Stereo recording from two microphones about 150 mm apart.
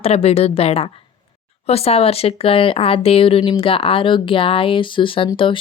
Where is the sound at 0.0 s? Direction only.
45° left (ahead or behind).